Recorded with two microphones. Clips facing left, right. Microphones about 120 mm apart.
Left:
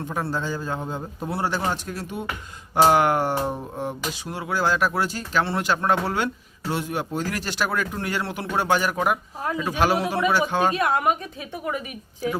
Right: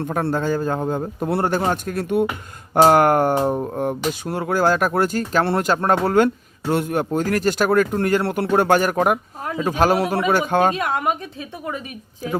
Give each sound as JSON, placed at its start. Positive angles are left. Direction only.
{"t": 0.0, "sound": "speech", "side_deg": -55}